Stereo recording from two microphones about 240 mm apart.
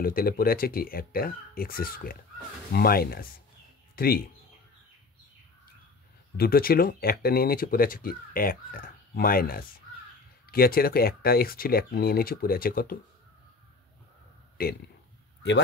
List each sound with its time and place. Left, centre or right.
0.0 s speech: left
3.9 s a sound: left
6.3 s speech: left
14.6 s speech: left